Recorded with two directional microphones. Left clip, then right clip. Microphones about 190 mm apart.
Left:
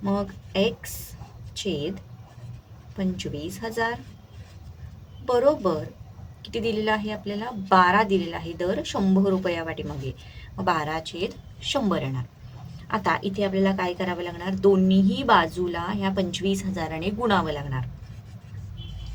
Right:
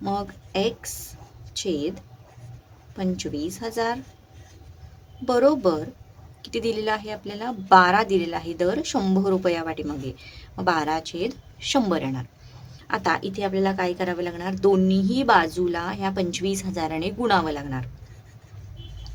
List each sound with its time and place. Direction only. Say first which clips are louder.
0.0 s speech: right 1 dB; 40° right (ahead or behind)
3.0 s a woman's voice: right 3 dB; 35° right (ahead or behind)
5.2 s a woman's voice: right 2 dB; 35° right (ahead or behind)
6.7 s a woman's voice: left 1 dB; 35° right (ahead or behind)